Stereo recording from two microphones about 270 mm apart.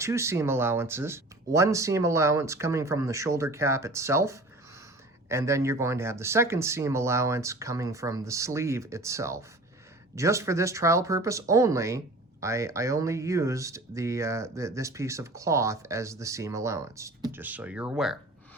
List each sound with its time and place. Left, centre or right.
0.0 s speech: centre